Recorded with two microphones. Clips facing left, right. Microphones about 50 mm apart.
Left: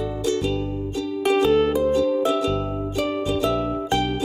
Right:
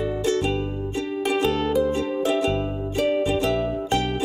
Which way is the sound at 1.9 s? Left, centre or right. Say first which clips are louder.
Left 3 dB; right.